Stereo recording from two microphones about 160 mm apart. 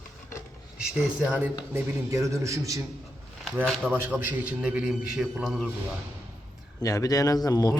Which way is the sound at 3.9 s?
10° right (ahead or behind).